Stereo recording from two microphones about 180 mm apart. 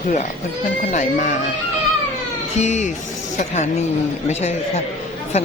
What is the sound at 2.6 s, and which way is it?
Speech, 40° left (ahead or behind).